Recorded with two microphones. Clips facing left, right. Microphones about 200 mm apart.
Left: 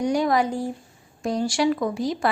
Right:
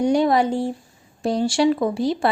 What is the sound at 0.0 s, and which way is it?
A woman's voice, 25° right (ahead or behind).